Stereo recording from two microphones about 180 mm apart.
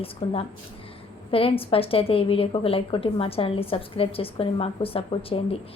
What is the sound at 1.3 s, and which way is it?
A woman's voice, 30° left (ahead or behind).